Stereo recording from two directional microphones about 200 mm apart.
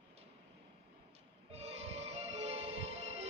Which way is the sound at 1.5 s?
30° right (ahead or behind).